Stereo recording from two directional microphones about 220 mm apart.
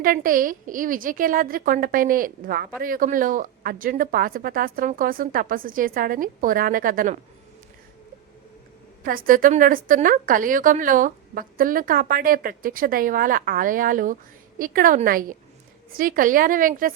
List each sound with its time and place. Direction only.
0.0 s a woman's voice: 40° right (ahead or behind)
9.0 s a woman's voice: 40° right (ahead or behind)